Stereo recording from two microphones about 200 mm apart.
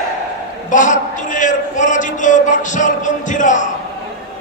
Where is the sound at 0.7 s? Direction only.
40° left (ahead or behind).